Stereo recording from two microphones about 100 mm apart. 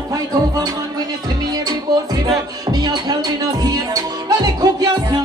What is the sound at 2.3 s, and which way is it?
Music, 45° right (ahead or behind).